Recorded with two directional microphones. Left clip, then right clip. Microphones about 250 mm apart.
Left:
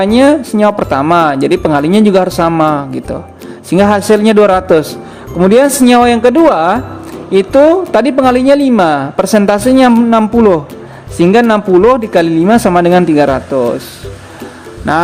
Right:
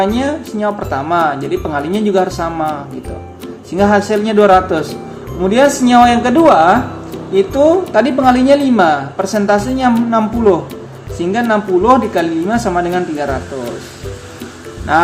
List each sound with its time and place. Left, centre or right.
0.0 s a woman's voice: left